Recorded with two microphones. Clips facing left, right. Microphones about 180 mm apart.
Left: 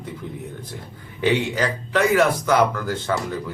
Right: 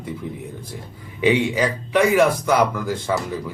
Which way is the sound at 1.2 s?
10° right (ahead or behind).